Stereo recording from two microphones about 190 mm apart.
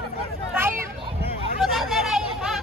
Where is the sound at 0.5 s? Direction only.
10° right (ahead or behind).